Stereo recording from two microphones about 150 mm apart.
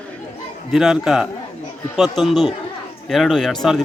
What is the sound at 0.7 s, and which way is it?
Speech, centre (ahead or behind).